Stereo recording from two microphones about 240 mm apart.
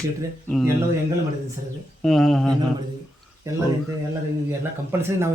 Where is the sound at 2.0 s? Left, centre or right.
Centre.